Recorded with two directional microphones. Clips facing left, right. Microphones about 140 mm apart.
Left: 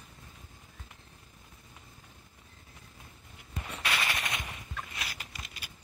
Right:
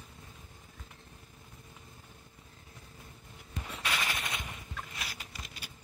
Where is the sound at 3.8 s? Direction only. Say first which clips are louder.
Left 2 dB; 75° left (ahead or behind).